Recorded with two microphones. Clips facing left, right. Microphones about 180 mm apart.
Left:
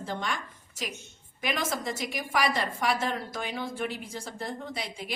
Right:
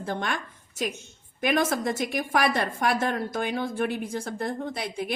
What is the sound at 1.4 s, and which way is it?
A woman's voice, 55° right (ahead or behind).